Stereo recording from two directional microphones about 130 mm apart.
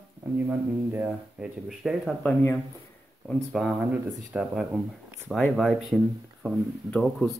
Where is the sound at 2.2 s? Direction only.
20° left (ahead or behind).